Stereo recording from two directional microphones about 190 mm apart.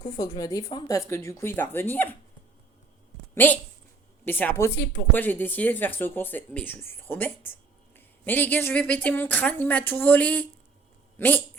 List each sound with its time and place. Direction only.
0.0 s speech: 20° left (ahead or behind)
3.3 s speech: 10° left (ahead or behind)